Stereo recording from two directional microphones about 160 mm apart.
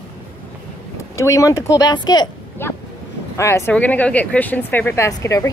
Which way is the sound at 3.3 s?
15° left (ahead or behind).